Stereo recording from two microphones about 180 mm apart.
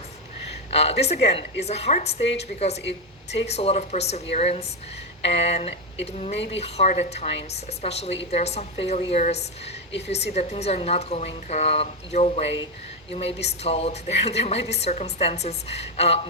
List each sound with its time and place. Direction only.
0.7 s a woman's voice: 35° left (ahead or behind)